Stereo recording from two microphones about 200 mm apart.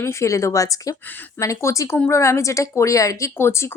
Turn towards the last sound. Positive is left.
turn(degrees=15)  # may be behind; listen again after turning